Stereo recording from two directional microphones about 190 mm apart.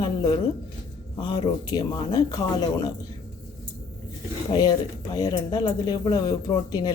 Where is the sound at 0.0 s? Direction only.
20° left (ahead or behind).